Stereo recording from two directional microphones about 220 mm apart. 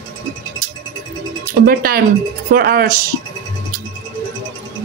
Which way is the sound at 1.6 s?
40° right (ahead or behind).